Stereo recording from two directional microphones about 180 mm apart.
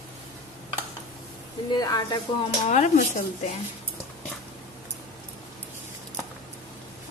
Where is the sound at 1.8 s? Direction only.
20° left (ahead or behind).